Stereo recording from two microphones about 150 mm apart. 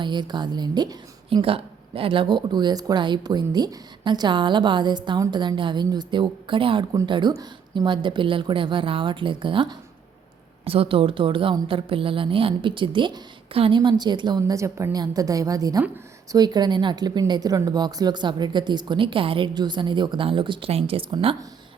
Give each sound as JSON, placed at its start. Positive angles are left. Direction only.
{"t": 0.0, "sound": "a woman's voice", "side_deg": -30}